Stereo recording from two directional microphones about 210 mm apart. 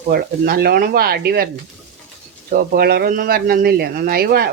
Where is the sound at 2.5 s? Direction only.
45° right (ahead or behind).